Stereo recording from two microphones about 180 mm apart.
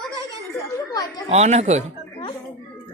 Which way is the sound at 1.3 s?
40° right (ahead or behind).